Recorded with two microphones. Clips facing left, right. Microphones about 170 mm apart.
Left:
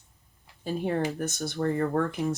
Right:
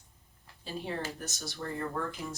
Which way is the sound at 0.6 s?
55° left (ahead or behind).